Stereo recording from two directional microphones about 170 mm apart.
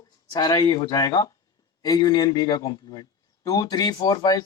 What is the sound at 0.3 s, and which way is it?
A man's voice, 25° left (ahead or behind).